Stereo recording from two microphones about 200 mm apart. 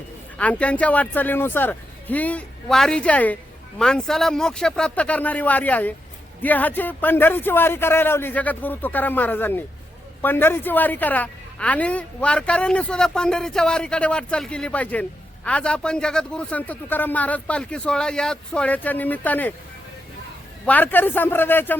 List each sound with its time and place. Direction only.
0.3 s a woman's voice: 5° left (ahead or behind)
20.7 s speech: 10° left (ahead or behind)